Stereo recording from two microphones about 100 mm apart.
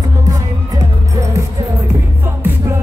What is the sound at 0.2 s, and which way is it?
Music, 40° right (ahead or behind).